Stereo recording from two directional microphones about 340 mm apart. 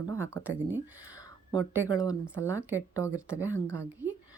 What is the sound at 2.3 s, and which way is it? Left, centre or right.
Speech, centre.